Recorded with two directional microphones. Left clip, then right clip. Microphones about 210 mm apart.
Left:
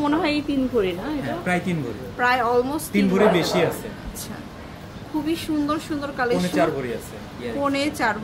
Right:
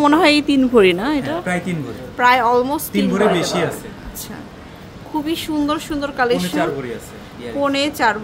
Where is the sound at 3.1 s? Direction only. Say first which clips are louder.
Right 2 dB; 15° right (ahead or behind).